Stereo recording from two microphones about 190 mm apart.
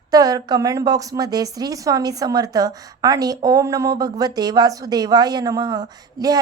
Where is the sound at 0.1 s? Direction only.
20° right (ahead or behind).